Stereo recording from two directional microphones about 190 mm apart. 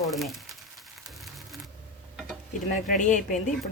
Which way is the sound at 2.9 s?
40° left (ahead or behind).